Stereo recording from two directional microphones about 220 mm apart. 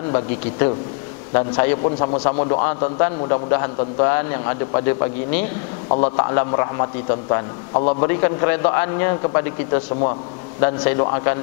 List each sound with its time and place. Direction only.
0.1 s a man's voice: 25° left (ahead or behind)
1.8 s a man's voice: 30° left (ahead or behind)
2.6 s a man's voice: 15° left (ahead or behind)
5.9 s a man's voice: 30° left (ahead or behind)
6.1 s a man's voice: 20° left (ahead or behind)